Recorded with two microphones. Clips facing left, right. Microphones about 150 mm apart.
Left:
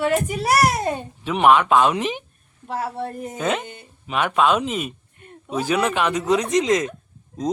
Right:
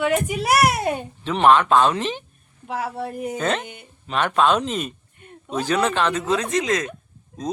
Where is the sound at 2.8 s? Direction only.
5° right (ahead or behind).